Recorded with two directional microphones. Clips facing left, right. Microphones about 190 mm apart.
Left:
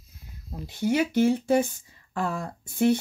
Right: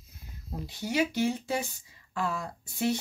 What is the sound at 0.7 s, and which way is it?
Speech, 55° left (ahead or behind).